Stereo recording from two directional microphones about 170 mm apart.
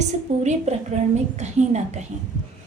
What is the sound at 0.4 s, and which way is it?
A woman's voice, 40° right (ahead or behind).